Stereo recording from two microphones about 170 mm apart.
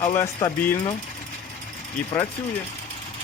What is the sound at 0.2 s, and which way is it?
Speech, 25° left (ahead or behind).